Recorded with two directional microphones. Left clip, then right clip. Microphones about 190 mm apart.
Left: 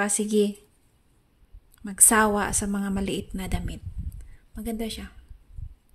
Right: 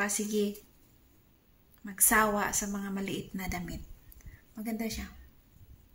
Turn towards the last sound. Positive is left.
turn(degrees=55)  # may be behind; listen again after turning